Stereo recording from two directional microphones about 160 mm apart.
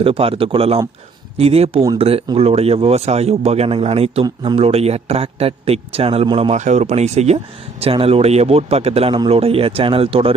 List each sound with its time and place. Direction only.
0.0 s speech: 35° right (ahead or behind)
6.6 s speech: 50° right (ahead or behind)